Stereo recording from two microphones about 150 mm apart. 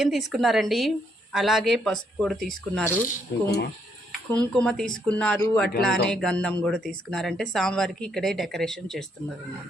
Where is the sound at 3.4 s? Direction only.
90° left.